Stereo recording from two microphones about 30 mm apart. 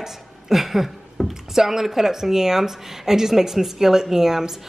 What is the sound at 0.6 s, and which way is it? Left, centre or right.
Frying, centre.